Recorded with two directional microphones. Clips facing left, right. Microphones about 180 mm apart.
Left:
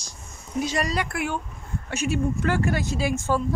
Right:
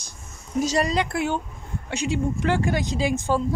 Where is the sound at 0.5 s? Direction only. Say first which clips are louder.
Right 3 dB; 40° right (ahead or behind).